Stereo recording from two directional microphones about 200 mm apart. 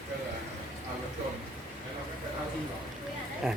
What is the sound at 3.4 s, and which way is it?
Speech, centre (ahead or behind).